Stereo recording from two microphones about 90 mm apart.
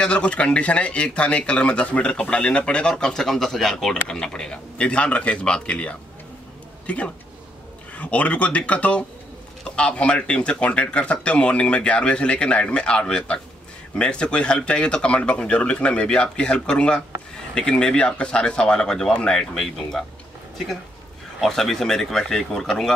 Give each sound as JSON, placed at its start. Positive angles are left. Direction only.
{"t": 0.0, "sound": "speech", "side_deg": 10}
{"t": 7.9, "sound": "speech", "side_deg": 15}
{"t": 21.4, "sound": "speech", "side_deg": 5}